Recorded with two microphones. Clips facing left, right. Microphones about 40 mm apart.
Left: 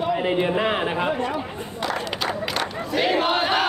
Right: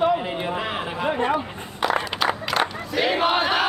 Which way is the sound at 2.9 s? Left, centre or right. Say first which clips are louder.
Even; centre.